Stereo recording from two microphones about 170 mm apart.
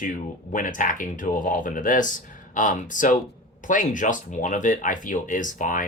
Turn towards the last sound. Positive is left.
turn(degrees=50)  # may be behind; listen again after turning